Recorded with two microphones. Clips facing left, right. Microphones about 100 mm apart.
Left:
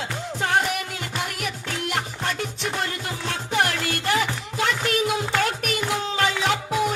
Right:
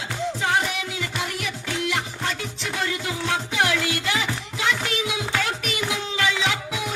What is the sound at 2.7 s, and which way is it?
Music, 45° left (ahead or behind).